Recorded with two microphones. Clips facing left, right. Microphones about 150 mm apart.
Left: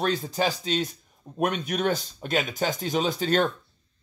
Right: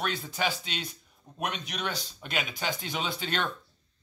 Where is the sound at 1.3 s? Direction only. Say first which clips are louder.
Left 9 dB; 50° left (ahead or behind).